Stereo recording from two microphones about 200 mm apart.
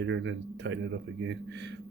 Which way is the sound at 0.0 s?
65° right (ahead or behind).